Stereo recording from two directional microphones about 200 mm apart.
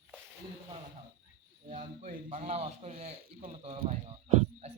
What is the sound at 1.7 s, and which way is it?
A man's voice, 35° right (ahead or behind).